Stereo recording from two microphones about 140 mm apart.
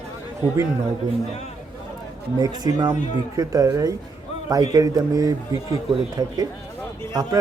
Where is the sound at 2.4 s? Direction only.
25° right (ahead or behind).